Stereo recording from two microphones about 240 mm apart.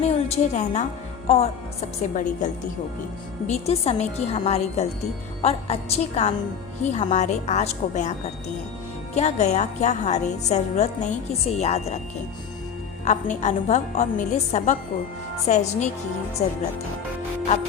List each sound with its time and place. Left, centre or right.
0.0 s a woman's voice: left
9.1 s a woman's voice: left
13.1 s a woman's voice: left